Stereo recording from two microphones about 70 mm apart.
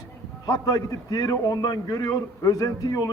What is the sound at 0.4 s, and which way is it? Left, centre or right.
A man's voice, left.